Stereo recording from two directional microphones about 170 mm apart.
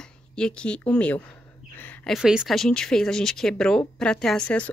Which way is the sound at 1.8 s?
10° left (ahead or behind).